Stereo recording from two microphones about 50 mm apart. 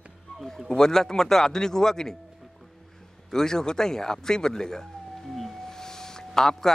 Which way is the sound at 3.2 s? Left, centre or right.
Centre.